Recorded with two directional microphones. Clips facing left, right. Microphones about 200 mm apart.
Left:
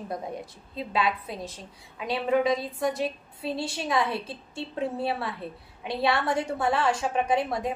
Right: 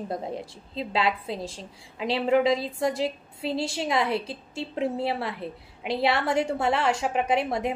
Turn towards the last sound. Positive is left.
turn(degrees=-25)  # may be behind; listen again after turning